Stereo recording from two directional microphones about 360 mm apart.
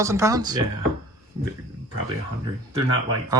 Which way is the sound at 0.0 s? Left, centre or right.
Centre.